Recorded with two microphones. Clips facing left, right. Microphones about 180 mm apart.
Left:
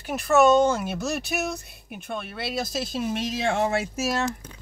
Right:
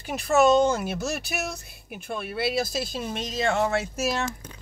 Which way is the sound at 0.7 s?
Centre (ahead or behind).